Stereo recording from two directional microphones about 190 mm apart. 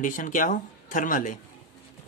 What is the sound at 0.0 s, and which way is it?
Speech, 45° left (ahead or behind).